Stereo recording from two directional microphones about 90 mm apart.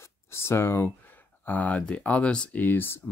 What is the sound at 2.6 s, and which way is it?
Speech, 20° left (ahead or behind).